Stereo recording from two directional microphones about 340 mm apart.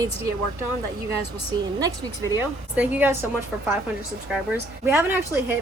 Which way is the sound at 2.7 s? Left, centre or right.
Centre.